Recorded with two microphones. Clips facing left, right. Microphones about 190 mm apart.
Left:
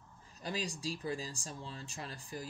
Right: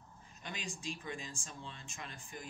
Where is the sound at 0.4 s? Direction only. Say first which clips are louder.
Left 7 dB; 35° left (ahead or behind).